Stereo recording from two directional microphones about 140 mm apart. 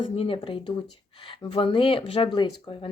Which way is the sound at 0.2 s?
40° left (ahead or behind).